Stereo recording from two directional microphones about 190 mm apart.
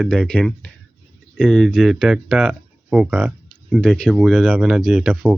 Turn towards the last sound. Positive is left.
turn(degrees=-5)  # may be behind; listen again after turning